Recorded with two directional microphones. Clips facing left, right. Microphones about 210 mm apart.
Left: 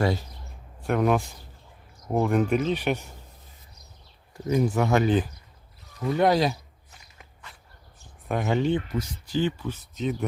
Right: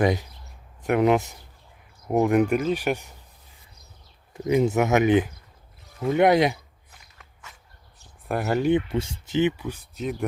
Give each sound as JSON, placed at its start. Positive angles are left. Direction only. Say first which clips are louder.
{"t": 0.0, "sound": "speech", "louder": "right 3 dB", "side_deg": -15}
{"t": 4.4, "sound": "speech", "louder": "right 3 dB", "side_deg": -20}
{"t": 8.3, "sound": "speech", "louder": "right 1 dB", "side_deg": -5}
{"t": 8.7, "sound": "speech", "louder": "right 4 dB", "side_deg": -25}
{"t": 9.6, "sound": "speech", "louder": "even", "side_deg": -10}